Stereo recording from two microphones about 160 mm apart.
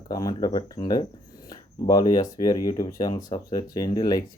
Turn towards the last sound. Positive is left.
turn(degrees=25)  # may be behind; listen again after turning